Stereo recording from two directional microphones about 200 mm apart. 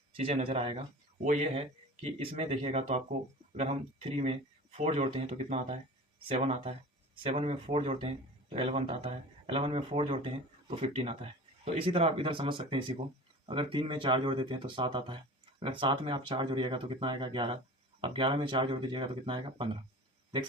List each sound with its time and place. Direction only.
0.2 s speech: 25° right (ahead or behind)
4.2 s speech: 30° right (ahead or behind)